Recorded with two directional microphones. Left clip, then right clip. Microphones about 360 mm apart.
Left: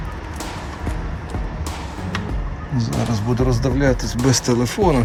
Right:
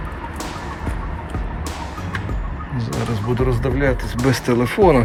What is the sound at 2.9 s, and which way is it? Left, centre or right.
Speech, centre.